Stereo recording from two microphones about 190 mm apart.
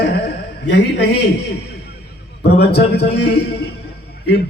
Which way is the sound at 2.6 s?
60° left (ahead or behind).